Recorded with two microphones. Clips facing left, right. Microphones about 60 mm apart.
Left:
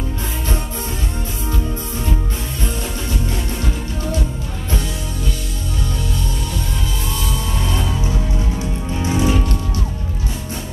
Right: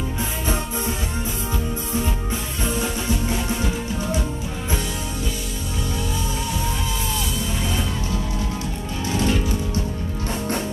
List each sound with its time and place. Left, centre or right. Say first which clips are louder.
2.6 s music: right 2 dB; centre
9.0 s music: left 3 dB; centre